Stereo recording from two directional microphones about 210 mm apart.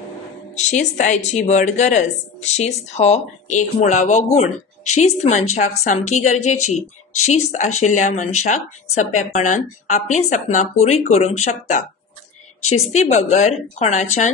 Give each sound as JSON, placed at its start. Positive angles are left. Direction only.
{"t": 0.6, "sound": "speech", "side_deg": 35}
{"t": 12.6, "sound": "a woman's voice", "side_deg": 90}
{"t": 12.9, "sound": "speech", "side_deg": 35}